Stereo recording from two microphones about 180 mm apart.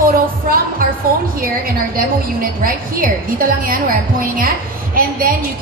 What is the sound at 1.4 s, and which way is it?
A man's voice, 55° right (ahead or behind).